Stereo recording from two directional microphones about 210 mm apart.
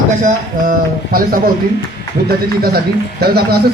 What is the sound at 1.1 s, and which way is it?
Speech, 45° right (ahead or behind).